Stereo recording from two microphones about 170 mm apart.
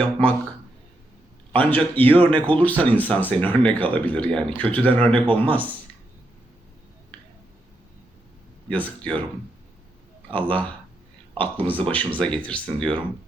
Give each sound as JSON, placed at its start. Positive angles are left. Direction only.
{"t": 1.5, "sound": "speech", "side_deg": 10}
{"t": 5.1, "sound": "speech", "side_deg": -30}
{"t": 8.7, "sound": "speech", "side_deg": 10}
{"t": 10.3, "sound": "speech", "side_deg": 10}